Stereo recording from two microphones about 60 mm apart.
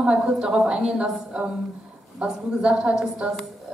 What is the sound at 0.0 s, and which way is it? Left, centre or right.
A woman's voice, centre.